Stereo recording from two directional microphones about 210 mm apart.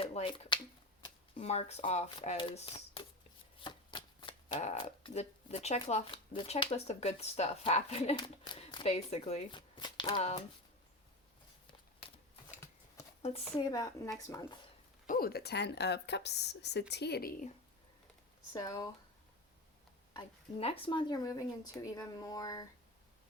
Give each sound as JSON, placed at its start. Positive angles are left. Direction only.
{"t": 0.0, "sound": "speech", "side_deg": 30}
{"t": 3.6, "sound": "shuffling cards", "side_deg": 20}
{"t": 4.6, "sound": "speech", "side_deg": 35}
{"t": 13.7, "sound": "speech", "side_deg": 20}
{"t": 15.0, "sound": "speech", "side_deg": 40}
{"t": 18.5, "sound": "speech", "side_deg": 20}
{"t": 20.1, "sound": "speech", "side_deg": 25}